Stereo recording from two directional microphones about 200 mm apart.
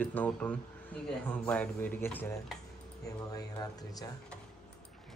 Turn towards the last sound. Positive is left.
turn(degrees=20)  # may be behind; listen again after turning